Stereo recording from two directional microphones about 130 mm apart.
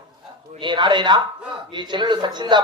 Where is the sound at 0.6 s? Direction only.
35° right (ahead or behind).